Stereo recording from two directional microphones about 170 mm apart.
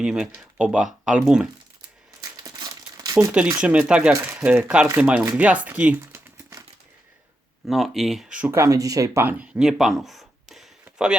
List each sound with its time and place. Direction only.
0.0 s speech: 5° right (ahead or behind)
2.3 s crumpling: 25° right (ahead or behind)
3.6 s speech: 5° right (ahead or behind)
7.7 s speech: centre (ahead or behind)